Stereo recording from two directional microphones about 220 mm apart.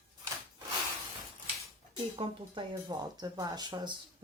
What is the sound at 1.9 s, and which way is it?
Speech, 20° right (ahead or behind).